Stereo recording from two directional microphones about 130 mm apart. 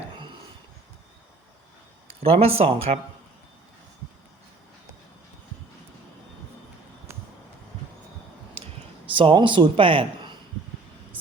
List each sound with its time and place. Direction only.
2.2 s speech: 50° right (ahead or behind)
9.0 s a man's voice: 40° right (ahead or behind)